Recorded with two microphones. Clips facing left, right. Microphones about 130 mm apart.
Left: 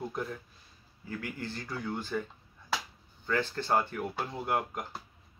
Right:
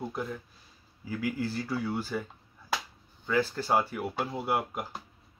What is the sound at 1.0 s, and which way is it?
Speech, 10° right (ahead or behind).